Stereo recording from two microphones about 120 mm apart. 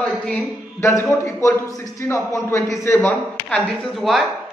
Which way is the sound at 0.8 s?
20° left (ahead or behind).